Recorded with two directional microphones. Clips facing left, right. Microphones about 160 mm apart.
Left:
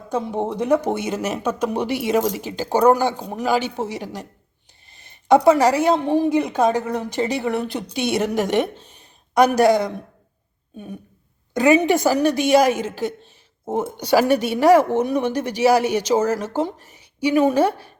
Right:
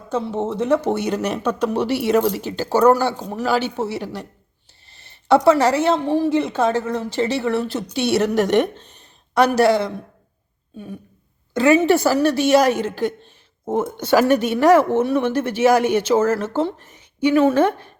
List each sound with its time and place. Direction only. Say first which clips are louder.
0.1 s a woman's voice: right 1 dB; 15° left (ahead or behind)
11.5 s speech: right 1 dB; 15° left (ahead or behind)